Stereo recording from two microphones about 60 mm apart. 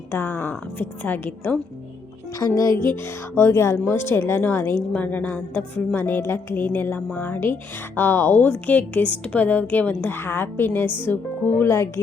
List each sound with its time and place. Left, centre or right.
0.1 s a woman's voice: left
2.4 s a woman's voice: left
4.9 s a woman's voice: left
6.0 s a woman's voice: left
11.6 s speech: left